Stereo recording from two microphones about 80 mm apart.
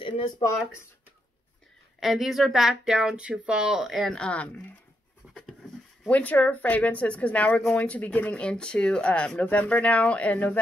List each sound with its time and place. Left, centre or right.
2.0 s speech: centre
4.1 s speech: centre
5.2 s a sound: centre
6.0 s speech: centre